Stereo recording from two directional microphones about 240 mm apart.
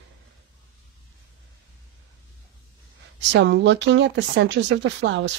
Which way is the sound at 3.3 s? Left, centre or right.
Right.